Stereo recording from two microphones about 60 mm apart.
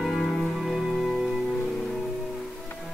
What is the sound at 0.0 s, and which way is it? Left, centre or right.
Music, centre.